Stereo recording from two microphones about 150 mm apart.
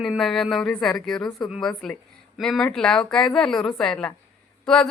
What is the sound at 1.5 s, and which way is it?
A woman's voice, 5° left (ahead or behind).